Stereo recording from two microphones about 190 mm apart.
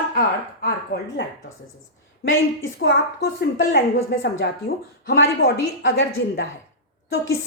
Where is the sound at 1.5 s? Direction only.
90° left.